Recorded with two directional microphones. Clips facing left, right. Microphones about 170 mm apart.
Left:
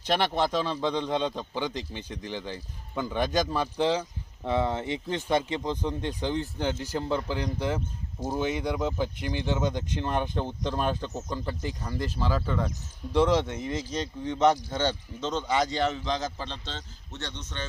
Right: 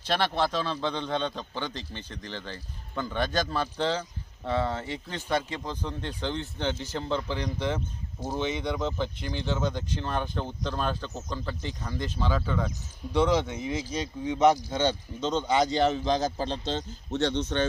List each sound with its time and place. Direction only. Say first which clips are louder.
0.0 s a man's voice: left 1 dB; 15° left (ahead or behind); by 17.2 s 45° right (ahead or behind)
17.2 s speech: right 12 dB; 30° right (ahead or behind)